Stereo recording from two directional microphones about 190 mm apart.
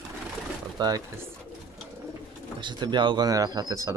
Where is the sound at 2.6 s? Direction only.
25° right (ahead or behind).